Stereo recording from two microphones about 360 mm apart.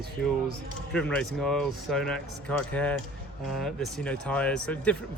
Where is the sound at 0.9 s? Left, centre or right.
Centre.